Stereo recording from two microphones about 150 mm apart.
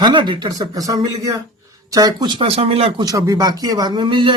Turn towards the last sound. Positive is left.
turn(degrees=-30)  # may be behind; listen again after turning